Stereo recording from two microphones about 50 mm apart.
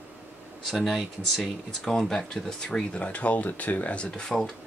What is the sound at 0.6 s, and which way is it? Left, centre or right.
Speech, centre.